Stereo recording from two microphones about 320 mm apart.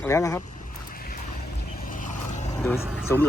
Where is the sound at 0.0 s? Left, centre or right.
Centre.